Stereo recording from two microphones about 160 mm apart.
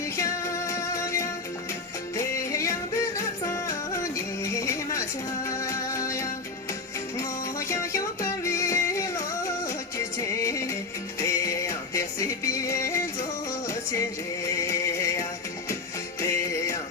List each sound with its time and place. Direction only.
0.2 s music: 20° left (ahead or behind)
7.7 s music: 20° left (ahead or behind)
14.4 s music: 20° left (ahead or behind)
16.2 s music: 20° left (ahead or behind)